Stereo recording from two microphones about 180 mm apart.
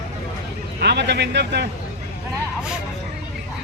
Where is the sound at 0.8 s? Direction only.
70° right (ahead or behind).